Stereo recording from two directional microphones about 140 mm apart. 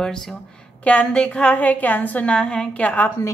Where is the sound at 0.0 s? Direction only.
5° left (ahead or behind).